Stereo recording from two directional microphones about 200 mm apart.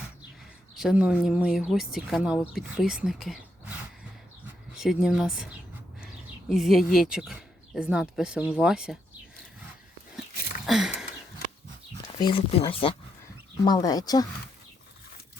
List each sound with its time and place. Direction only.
0.8 s speech: 5° right (ahead or behind)
4.8 s speech: centre (ahead or behind)
6.5 s speech: centre (ahead or behind)
10.7 s speech: centre (ahead or behind)
12.2 s speech: 25° left (ahead or behind)